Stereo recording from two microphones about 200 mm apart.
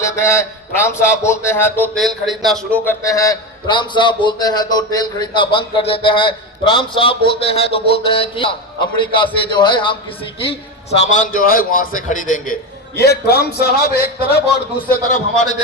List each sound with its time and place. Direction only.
0.0 s speech: 15° left (ahead or behind)
2.0 s a man's voice: centre (ahead or behind); by 10.0 s 25° left (ahead or behind)
10.5 s a man's voice: 35° left (ahead or behind)
13.0 s a man's voice: 55° left (ahead or behind)